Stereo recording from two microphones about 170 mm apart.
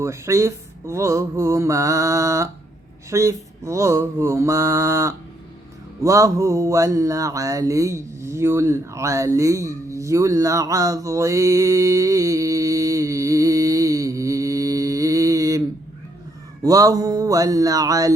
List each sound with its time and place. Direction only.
0.0 s speech: 15° right (ahead or behind)
6.0 s mantra: 20° right (ahead or behind)
16.6 s a sound: 20° right (ahead or behind)